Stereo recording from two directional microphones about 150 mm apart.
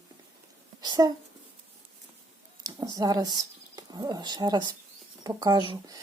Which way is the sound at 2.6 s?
25° right (ahead or behind).